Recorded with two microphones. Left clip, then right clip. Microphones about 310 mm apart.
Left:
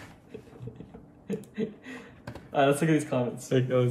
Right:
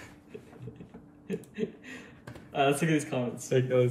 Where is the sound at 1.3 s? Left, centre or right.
Centre.